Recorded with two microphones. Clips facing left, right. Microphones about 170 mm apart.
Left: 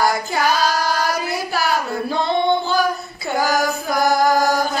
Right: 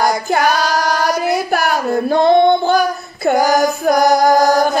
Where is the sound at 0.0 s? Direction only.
55° right (ahead or behind).